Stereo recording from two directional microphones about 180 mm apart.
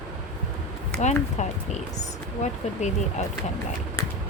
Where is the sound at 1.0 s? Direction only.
40° left (ahead or behind).